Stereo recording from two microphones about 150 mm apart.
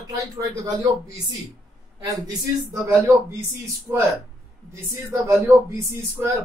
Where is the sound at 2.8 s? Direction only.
20° right (ahead or behind).